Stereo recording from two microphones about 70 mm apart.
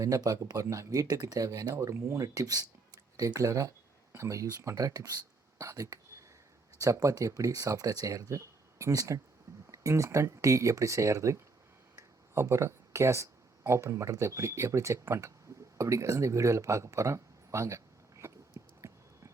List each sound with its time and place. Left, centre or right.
0.2 s speech: right
0.5 s speech: right
1.7 s speech: right
3.2 s speech: right
11.9 s a sound: right
13.7 s speech: right
18.8 s a sound: right